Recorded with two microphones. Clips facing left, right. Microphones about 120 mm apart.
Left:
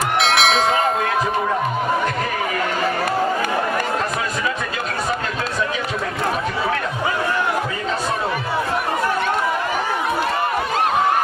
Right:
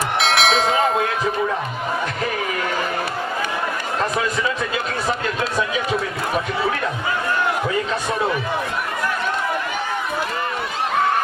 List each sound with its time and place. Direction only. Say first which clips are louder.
0.2 s bell: even; centre (ahead or behind)